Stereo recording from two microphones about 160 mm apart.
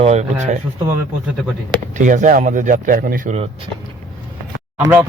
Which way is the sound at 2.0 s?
55° right (ahead or behind).